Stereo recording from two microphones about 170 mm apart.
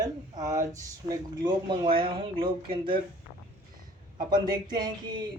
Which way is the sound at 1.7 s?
30° right (ahead or behind).